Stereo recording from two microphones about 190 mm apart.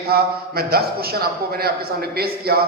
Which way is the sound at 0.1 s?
55° right (ahead or behind).